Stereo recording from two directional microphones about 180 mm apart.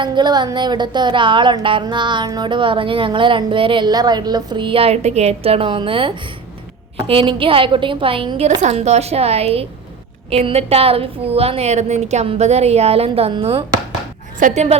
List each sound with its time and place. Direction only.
0.0 s a sound: 25° right (ahead or behind)
8.6 s a woman's voice: 40° right (ahead or behind)
14.3 s a woman's voice: 45° right (ahead or behind)